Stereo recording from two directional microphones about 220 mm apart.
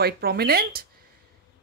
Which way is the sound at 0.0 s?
45° right (ahead or behind).